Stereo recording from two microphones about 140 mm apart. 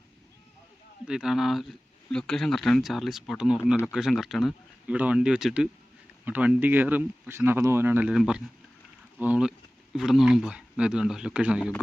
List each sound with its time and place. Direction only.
1.0 s speech: 5° right (ahead or behind)
8.1 s speech: 5° right (ahead or behind)